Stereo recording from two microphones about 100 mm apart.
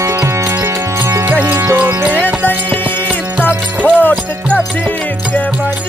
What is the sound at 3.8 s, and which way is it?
Music, 15° left (ahead or behind).